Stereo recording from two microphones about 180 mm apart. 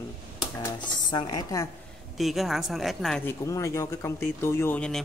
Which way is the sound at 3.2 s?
15° left (ahead or behind).